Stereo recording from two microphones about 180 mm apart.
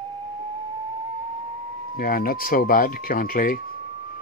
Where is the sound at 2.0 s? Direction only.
50° left (ahead or behind).